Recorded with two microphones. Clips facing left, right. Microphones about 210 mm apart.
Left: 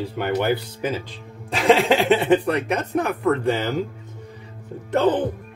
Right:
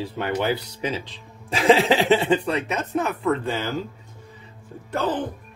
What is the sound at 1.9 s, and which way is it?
Speech, centre (ahead or behind).